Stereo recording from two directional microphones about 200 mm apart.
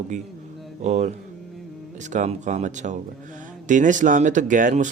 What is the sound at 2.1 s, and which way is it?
A man's voice, 35° right (ahead or behind).